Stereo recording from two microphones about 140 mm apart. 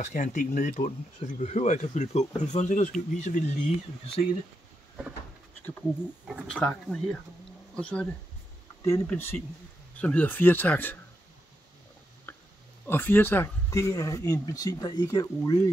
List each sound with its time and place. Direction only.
0.0 s speech: 65° left (ahead or behind)
6.5 s speech: 5° left (ahead or behind)
12.3 s a sound: 15° left (ahead or behind)
12.8 s speech: 15° left (ahead or behind)